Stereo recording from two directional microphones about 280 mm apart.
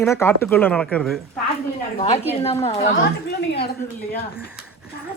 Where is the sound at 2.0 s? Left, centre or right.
Left.